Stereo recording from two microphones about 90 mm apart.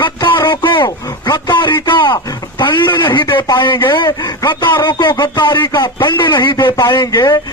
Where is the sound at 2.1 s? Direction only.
40° left (ahead or behind).